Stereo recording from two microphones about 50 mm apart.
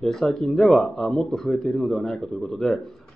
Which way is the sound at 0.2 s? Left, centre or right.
Centre.